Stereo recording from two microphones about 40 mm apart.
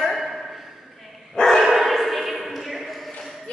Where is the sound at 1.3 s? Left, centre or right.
Centre.